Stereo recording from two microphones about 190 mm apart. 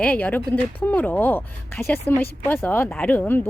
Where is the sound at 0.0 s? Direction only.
5° left (ahead or behind).